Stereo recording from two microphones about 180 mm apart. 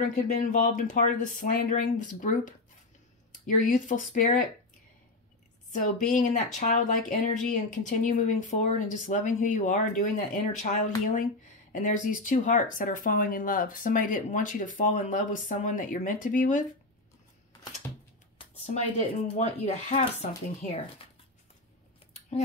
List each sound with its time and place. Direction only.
0.0 s speech: 45° left (ahead or behind)
5.7 s speech: 45° left (ahead or behind)
18.4 s speech: 35° left (ahead or behind)